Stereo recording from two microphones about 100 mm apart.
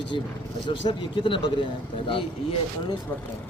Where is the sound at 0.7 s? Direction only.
55° left (ahead or behind).